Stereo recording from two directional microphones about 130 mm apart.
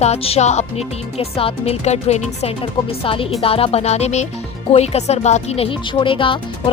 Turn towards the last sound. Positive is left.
turn(degrees=40)  # may be behind; listen again after turning